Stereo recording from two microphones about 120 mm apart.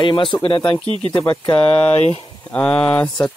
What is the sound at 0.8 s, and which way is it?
Speech, 50° right (ahead or behind).